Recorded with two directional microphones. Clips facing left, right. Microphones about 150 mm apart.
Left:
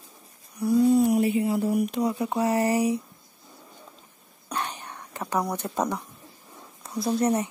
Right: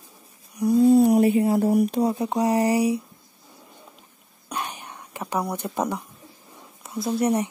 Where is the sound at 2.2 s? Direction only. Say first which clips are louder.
Right 2 dB; 20° right (ahead or behind).